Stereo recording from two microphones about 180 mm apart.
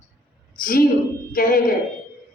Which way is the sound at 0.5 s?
50° left (ahead or behind).